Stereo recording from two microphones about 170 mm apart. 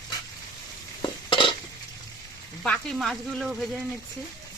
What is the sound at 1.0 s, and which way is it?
Stir, 30° left (ahead or behind).